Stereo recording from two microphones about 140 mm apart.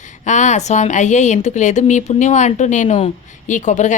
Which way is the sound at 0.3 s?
60° left (ahead or behind).